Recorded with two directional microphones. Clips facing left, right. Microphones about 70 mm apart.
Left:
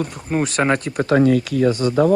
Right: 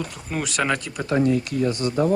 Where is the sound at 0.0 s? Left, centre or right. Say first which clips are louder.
Left 7 dB; left.